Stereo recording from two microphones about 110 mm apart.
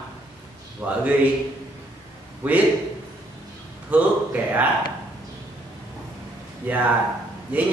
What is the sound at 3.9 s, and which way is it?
Speech, 15° right (ahead or behind).